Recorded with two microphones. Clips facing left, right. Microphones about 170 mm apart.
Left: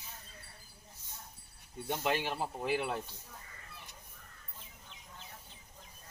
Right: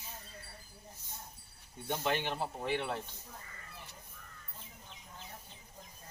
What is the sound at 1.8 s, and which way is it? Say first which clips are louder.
Speech: left 1 dB; 10° left (ahead or behind).